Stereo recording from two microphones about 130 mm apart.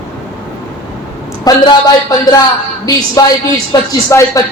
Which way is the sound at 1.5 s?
30° left (ahead or behind).